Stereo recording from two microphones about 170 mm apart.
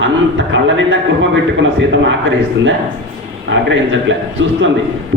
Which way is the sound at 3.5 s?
90° right.